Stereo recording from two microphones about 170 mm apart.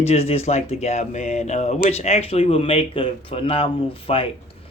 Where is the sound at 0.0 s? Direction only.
40° left (ahead or behind).